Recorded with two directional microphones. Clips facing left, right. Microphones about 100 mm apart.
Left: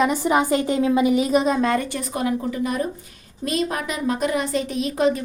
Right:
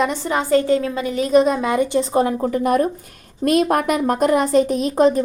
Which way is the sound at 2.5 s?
50° right (ahead or behind).